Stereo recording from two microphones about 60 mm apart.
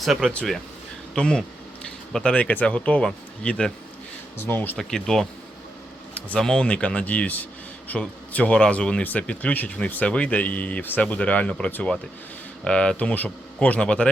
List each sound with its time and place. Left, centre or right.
0.0 s speech: centre
1.1 s speech: centre
4.4 s speech: left
4.8 s speech: centre
6.1 s speech: left